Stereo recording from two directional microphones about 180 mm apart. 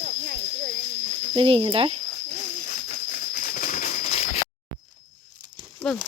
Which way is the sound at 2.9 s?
55° left (ahead or behind).